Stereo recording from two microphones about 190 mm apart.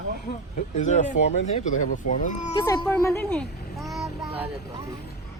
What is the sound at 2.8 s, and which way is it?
Speech, 10° left (ahead or behind).